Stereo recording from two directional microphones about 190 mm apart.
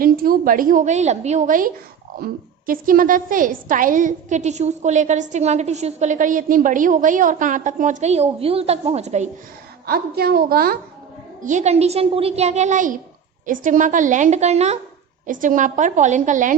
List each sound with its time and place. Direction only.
0.0 s a woman's voice: 50° right (ahead or behind)
9.8 s a woman's voice: 55° right (ahead or behind)
11.4 s a woman's voice: 40° right (ahead or behind)